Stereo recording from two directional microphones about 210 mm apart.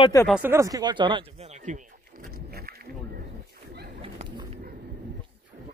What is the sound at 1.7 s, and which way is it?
Speech, 35° right (ahead or behind).